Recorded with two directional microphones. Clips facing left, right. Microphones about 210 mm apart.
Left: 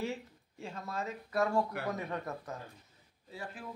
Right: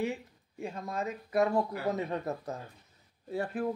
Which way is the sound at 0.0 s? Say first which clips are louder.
Right 4 dB; 15° right (ahead or behind).